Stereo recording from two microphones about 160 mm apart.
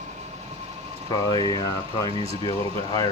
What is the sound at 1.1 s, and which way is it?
Speech, 25° left (ahead or behind).